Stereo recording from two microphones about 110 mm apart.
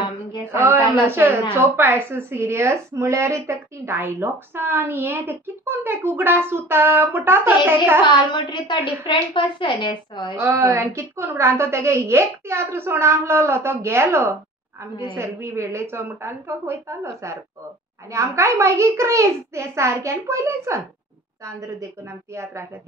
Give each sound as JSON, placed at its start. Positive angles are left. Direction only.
{"t": 0.5, "sound": "a woman's voice", "side_deg": -20}
{"t": 8.0, "sound": "a woman's voice", "side_deg": 45}
{"t": 10.4, "sound": "a woman's voice", "side_deg": -25}